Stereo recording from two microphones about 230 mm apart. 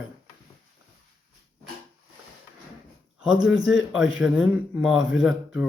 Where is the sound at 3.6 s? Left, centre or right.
Centre.